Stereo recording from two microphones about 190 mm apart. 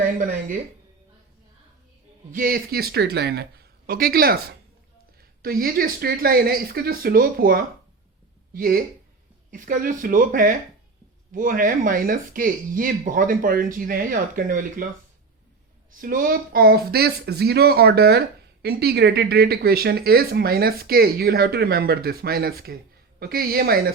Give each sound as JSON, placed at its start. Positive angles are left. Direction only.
{"t": 2.3, "sound": "speech", "side_deg": -50}
{"t": 15.9, "sound": "speech", "side_deg": -45}